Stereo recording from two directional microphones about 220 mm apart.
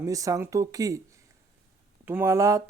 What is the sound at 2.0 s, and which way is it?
Speech, 10° right (ahead or behind).